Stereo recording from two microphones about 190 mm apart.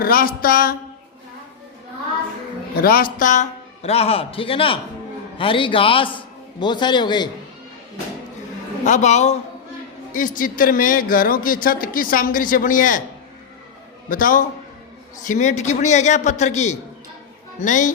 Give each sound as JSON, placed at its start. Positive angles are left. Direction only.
{"t": 0.0, "sound": "speech", "side_deg": 50}
{"t": 2.8, "sound": "speech", "side_deg": 50}
{"t": 3.8, "sound": "a man's voice", "side_deg": 30}
{"t": 8.8, "sound": "a man's voice", "side_deg": 40}
{"t": 14.1, "sound": "a man's voice", "side_deg": 45}